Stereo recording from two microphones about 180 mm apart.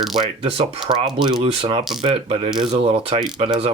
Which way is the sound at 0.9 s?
30° right (ahead or behind).